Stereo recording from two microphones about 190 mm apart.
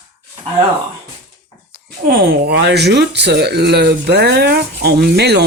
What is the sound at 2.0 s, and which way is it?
Speech, 55° right (ahead or behind).